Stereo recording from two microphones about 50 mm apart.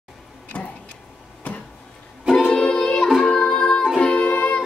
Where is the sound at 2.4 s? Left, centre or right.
Centre.